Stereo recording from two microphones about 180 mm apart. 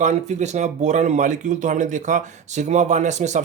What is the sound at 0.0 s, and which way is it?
Speech, 40° right (ahead or behind).